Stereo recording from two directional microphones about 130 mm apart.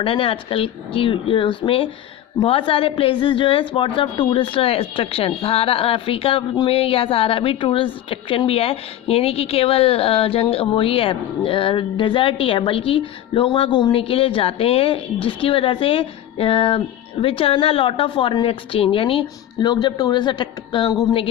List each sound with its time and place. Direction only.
0.0 s speech: 45° left (ahead or behind)